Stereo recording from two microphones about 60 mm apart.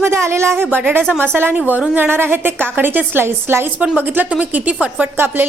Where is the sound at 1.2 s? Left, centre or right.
Right.